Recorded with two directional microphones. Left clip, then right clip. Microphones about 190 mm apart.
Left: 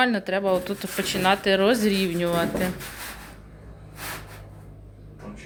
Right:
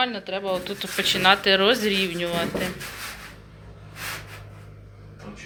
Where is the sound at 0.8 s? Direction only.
20° left (ahead or behind).